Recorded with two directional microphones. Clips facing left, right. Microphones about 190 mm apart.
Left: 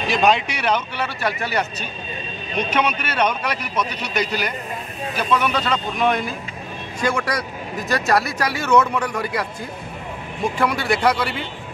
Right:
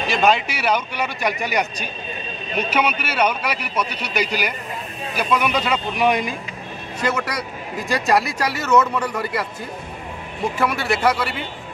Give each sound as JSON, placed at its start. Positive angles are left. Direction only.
{"t": 0.1, "sound": "speech", "side_deg": 0}
{"t": 10.6, "sound": "a man's voice", "side_deg": -5}